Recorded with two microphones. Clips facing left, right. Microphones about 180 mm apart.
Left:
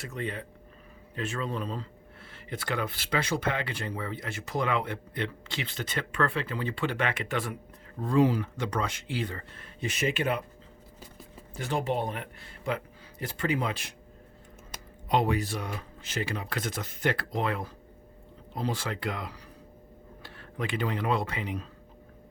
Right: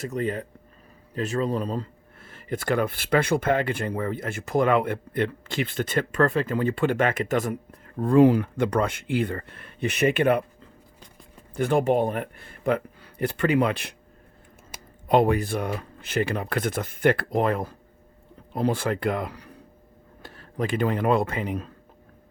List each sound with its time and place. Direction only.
0.0 s speech: 40° right (ahead or behind)
8.0 s speech: 55° right (ahead or behind)
11.5 s speech: 55° right (ahead or behind)
15.0 s speech: 55° right (ahead or behind)
20.2 s speech: 40° right (ahead or behind)